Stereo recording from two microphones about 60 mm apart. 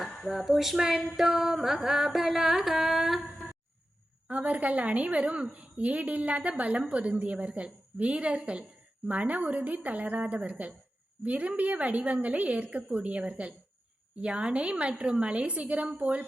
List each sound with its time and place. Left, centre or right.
0.3 s music: centre
4.3 s a woman's voice: right